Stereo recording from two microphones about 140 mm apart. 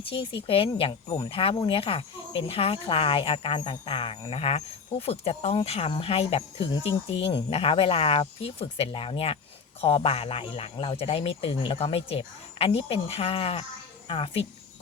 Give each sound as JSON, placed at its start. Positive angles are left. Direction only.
{"t": 0.0, "sound": "speech", "side_deg": 40}